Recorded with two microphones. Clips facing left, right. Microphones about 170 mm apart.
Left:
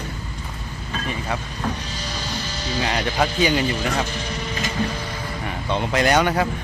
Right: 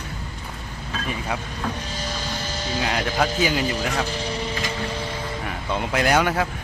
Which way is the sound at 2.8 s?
5° right (ahead or behind).